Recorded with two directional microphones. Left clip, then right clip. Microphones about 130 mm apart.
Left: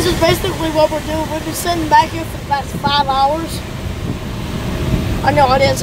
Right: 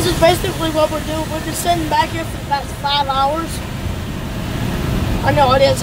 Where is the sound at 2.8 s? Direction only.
15° left (ahead or behind).